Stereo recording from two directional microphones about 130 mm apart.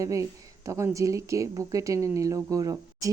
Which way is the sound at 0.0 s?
25° right (ahead or behind).